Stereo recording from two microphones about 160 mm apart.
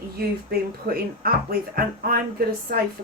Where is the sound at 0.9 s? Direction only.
65° right (ahead or behind).